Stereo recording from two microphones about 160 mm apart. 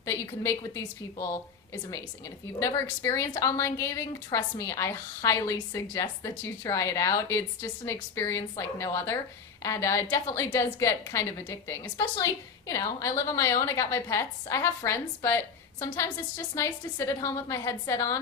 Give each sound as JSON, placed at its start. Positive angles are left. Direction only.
{"t": 0.0, "sound": "a woman's voice", "side_deg": 20}
{"t": 16.6, "sound": "a woman's voice", "side_deg": 20}